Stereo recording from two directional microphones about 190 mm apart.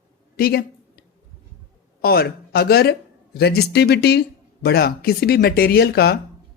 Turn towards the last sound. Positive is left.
turn(degrees=55)  # may be behind; listen again after turning